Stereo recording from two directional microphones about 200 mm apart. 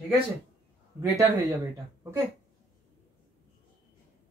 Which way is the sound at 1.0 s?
15° right (ahead or behind).